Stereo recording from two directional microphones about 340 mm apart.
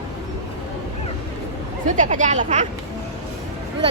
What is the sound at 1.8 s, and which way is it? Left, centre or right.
Speech, right.